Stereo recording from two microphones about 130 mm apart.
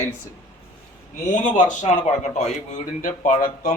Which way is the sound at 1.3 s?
70° left (ahead or behind).